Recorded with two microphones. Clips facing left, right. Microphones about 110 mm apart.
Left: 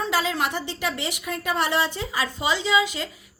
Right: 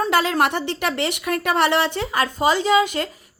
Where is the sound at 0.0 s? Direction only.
60° right (ahead or behind).